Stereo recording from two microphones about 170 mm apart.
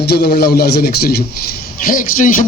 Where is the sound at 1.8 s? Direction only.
55° left (ahead or behind).